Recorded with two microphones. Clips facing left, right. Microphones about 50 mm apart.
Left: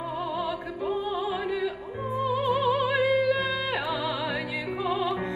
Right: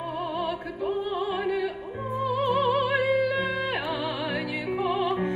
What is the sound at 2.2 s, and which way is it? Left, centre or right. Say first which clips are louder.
Music: right 1 dB; right.